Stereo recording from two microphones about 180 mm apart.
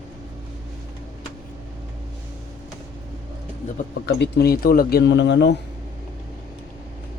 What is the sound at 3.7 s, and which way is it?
Speech, 65° left (ahead or behind).